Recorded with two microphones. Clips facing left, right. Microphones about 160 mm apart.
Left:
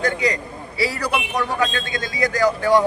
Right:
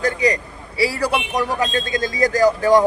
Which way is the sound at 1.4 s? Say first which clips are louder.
Right 1 dB; 35° right (ahead or behind).